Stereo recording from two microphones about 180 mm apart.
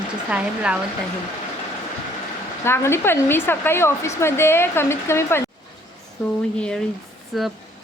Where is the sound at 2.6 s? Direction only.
15° left (ahead or behind).